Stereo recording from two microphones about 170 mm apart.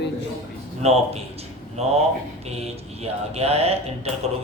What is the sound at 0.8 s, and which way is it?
A man's voice, 35° right (ahead or behind).